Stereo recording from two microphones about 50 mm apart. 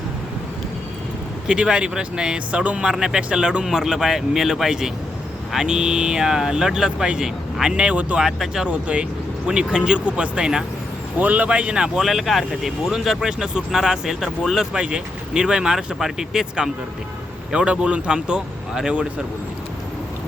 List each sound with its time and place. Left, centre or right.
1.5 s speech: centre
8.2 s speech: centre
8.6 s speech: right
11.2 s speech: right
11.4 s speech: right
12.0 s speech: centre
14.8 s speech: centre